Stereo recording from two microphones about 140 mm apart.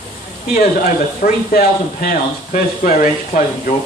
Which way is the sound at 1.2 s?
90° left.